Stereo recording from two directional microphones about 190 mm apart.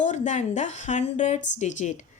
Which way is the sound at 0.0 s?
40° left (ahead or behind).